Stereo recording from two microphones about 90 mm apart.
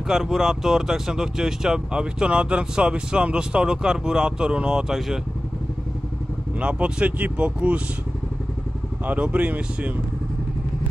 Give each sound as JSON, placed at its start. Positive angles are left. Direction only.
{"t": 0.1, "sound": "speech", "side_deg": -5}
{"t": 6.6, "sound": "speech", "side_deg": -15}
{"t": 9.0, "sound": "speech", "side_deg": -15}